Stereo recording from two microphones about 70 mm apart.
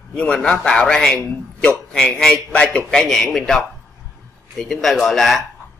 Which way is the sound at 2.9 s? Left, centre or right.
Centre.